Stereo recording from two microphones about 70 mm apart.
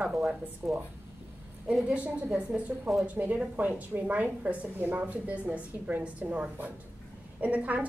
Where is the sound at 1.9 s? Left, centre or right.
Centre.